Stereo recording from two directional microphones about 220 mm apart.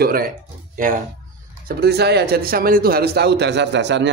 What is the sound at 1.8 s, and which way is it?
Speech, 50° right (ahead or behind).